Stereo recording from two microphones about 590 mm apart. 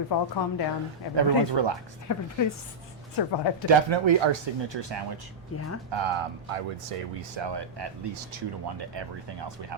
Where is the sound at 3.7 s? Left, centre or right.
Right.